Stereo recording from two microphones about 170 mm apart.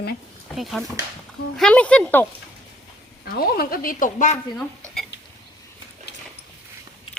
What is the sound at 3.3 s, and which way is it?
Speech, 60° left (ahead or behind).